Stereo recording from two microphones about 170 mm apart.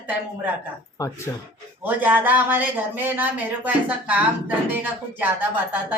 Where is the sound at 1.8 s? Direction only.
10° right (ahead or behind).